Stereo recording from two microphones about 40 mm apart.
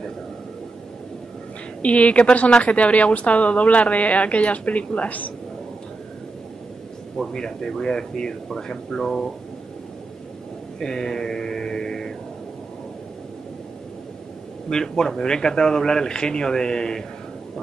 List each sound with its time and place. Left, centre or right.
1.8 s a woman's voice: left
7.3 s speech: centre
10.8 s speech: centre
14.7 s speech: centre